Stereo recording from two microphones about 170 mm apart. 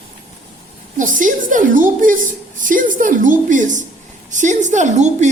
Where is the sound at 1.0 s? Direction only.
50° right (ahead or behind).